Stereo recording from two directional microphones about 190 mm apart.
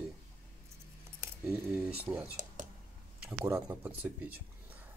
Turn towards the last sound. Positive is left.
turn(degrees=-10)  # may be behind; listen again after turning